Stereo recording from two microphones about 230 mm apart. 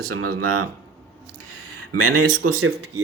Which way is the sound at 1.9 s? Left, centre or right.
Right.